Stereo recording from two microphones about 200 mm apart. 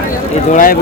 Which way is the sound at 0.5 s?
45° left (ahead or behind).